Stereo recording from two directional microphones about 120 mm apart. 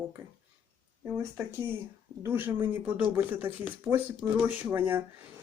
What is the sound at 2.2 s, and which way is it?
Speech, 15° right (ahead or behind).